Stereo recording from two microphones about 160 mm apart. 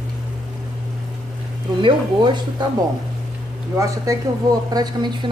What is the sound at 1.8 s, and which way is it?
Speech, 30° right (ahead or behind).